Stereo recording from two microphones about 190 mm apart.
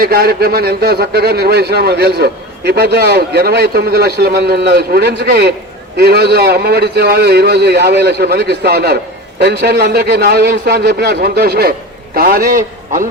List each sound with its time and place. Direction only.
0.0 s a man's voice: 50° right (ahead or behind)